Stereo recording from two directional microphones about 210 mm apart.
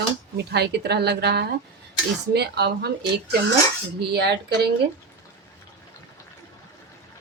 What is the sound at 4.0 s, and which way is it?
Speech, 50° right (ahead or behind).